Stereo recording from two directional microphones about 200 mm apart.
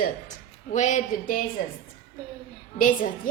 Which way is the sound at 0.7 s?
35° left (ahead or behind).